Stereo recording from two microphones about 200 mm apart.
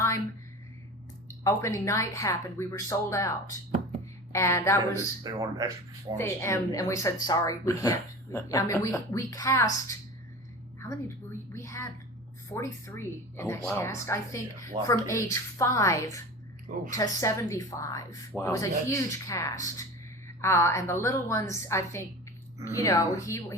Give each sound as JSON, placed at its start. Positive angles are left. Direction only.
{"t": 1.5, "sound": "speech", "side_deg": 15}
{"t": 5.2, "sound": "speech", "side_deg": -20}
{"t": 6.1, "sound": "speech", "side_deg": 15}
{"t": 11.5, "sound": "a sound", "side_deg": 15}
{"t": 12.5, "sound": "speech", "side_deg": 15}